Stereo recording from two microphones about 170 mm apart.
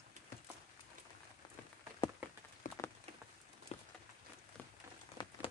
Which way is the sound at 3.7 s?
40° left (ahead or behind).